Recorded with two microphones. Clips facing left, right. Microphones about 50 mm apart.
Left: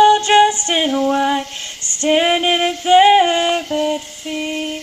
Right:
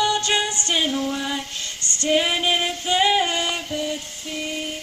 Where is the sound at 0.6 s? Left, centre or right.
Left.